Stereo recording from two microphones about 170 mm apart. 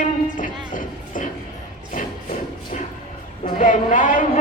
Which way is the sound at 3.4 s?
50° left (ahead or behind).